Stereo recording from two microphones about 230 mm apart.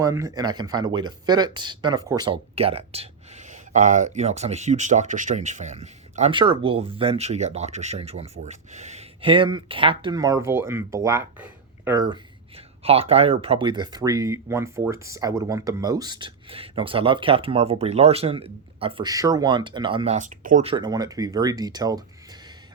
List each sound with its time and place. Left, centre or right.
0.0 s speech: centre